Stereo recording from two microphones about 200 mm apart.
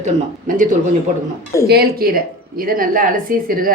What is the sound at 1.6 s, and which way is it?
A woman's voice, 50° right (ahead or behind).